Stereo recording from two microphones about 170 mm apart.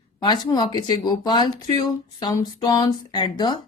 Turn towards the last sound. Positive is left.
turn(degrees=25)  # may be behind; listen again after turning